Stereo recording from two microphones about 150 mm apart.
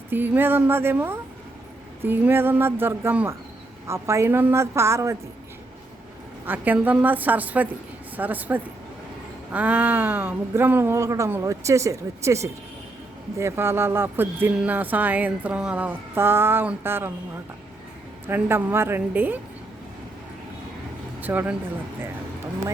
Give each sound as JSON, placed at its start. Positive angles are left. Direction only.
{"t": 0.1, "sound": "a woman's voice", "side_deg": -15}
{"t": 6.4, "sound": "speech", "side_deg": -10}
{"t": 18.3, "sound": "speech", "side_deg": -15}
{"t": 21.2, "sound": "speech", "side_deg": -10}